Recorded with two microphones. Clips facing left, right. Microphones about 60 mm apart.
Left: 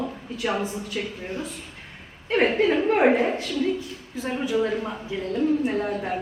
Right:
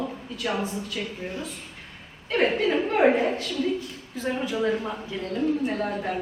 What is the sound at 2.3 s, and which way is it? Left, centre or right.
A woman's voice, centre.